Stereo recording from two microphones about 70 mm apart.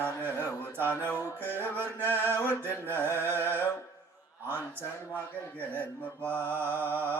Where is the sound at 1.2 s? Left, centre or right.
Right.